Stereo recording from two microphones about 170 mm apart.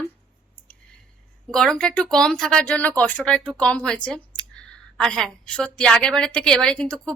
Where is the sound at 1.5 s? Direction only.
5° left (ahead or behind).